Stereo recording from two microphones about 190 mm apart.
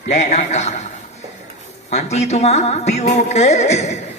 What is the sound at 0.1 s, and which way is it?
Speech, 35° left (ahead or behind).